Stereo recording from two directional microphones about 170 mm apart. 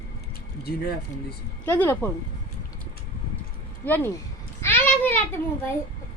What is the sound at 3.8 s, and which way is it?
A child's voice, 10° left (ahead or behind).